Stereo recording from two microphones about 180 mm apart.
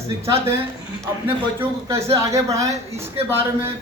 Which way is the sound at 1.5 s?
15° right (ahead or behind).